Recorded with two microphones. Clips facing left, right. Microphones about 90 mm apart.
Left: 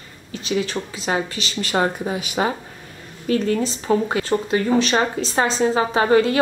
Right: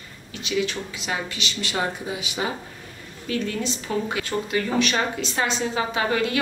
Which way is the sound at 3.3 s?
35° left (ahead or behind).